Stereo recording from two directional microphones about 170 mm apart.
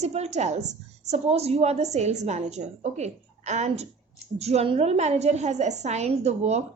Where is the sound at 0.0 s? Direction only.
40° right (ahead or behind).